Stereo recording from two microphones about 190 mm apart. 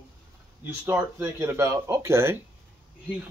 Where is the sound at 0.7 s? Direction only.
10° right (ahead or behind).